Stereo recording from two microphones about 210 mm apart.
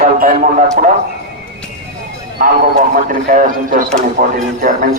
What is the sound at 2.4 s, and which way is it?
A man's voice, 40° right (ahead or behind).